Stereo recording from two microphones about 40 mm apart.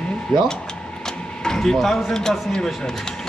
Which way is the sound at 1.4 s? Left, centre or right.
Centre.